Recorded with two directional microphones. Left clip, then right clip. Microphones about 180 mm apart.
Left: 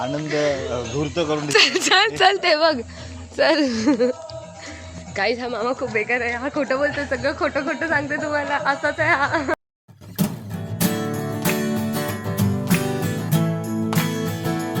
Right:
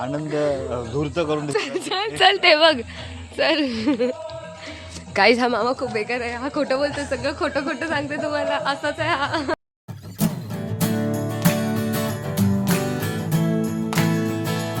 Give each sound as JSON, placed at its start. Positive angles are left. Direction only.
{"t": 0.0, "sound": "speech", "side_deg": -15}
{"t": 0.7, "sound": "speech", "side_deg": -20}
{"t": 1.5, "sound": "a woman's voice", "side_deg": 5}
{"t": 2.4, "sound": "speech", "side_deg": -5}
{"t": 3.3, "sound": "a woman's voice", "side_deg": 15}
{"t": 5.1, "sound": "speech", "side_deg": -55}
{"t": 5.6, "sound": "speech", "side_deg": -5}
{"t": 7.1, "sound": "speech", "side_deg": 20}
{"t": 10.2, "sound": "music", "side_deg": 0}